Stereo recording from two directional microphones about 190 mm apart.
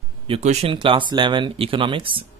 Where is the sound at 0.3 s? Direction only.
35° right (ahead or behind).